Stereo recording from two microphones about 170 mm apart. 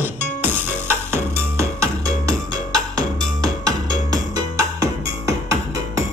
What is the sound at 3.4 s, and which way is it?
Music, 20° right (ahead or behind).